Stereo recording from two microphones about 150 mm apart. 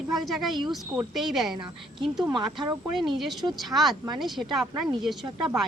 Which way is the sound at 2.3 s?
30° right (ahead or behind).